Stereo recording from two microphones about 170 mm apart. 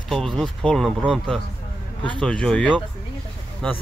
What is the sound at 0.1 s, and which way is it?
Speech, centre (ahead or behind).